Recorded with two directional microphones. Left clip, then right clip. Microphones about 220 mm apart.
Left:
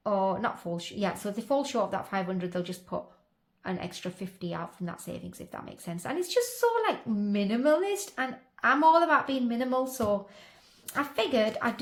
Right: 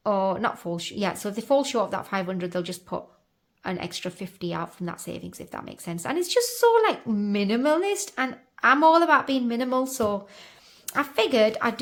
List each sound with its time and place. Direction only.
0.0 s speech: 30° right (ahead or behind)